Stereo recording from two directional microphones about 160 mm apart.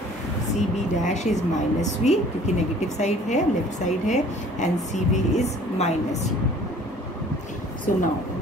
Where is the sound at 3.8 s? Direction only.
50° left (ahead or behind).